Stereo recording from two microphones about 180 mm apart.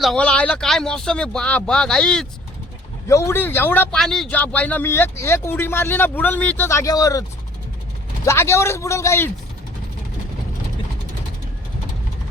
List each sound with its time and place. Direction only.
0.0 s speech: 5° left (ahead or behind)
3.1 s speech: 15° left (ahead or behind)